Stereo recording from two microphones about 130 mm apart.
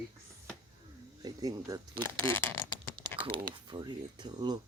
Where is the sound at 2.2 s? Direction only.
15° left (ahead or behind).